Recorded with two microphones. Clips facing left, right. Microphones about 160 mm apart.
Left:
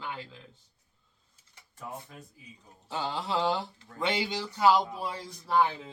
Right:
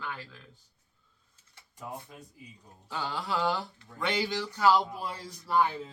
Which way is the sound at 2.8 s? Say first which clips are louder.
Left 1 dB; 25° left (ahead or behind).